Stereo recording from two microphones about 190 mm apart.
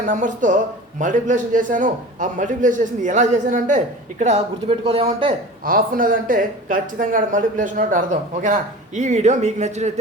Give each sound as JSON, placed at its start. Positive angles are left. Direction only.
{"t": 0.0, "sound": "a man's voice", "side_deg": -45}
{"t": 5.6, "sound": "a man's voice", "side_deg": -50}